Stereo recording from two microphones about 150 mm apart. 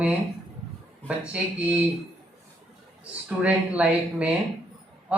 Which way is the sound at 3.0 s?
5° right (ahead or behind).